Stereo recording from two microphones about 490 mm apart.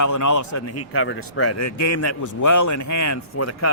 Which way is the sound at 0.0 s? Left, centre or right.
Left.